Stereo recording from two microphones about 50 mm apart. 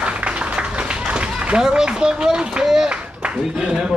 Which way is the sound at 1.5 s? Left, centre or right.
Centre.